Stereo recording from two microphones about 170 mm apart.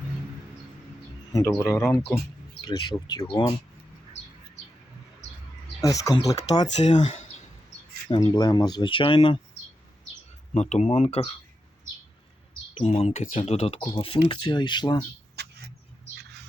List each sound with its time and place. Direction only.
1.3 s speech: 20° left (ahead or behind)
5.8 s speech: 20° left (ahead or behind)
6.7 s speech: 40° left (ahead or behind)
8.1 s speech: 25° left (ahead or behind)
10.5 s speech: 40° left (ahead or behind)
12.7 s speech: 35° left (ahead or behind)
15.4 s vehicle: 75° right (ahead or behind)